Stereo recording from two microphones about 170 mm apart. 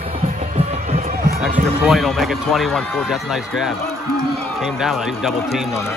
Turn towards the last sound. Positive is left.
turn(degrees=0)  # may be behind; listen again after turning